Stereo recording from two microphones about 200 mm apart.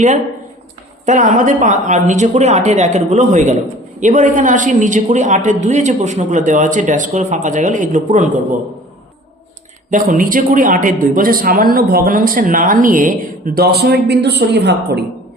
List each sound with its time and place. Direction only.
1.0 s a man's voice: 40° right (ahead or behind)
9.9 s speech: 45° right (ahead or behind)